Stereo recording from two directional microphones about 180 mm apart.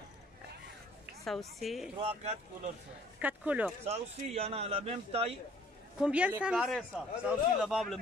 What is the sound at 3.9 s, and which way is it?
Speech, 35° right (ahead or behind).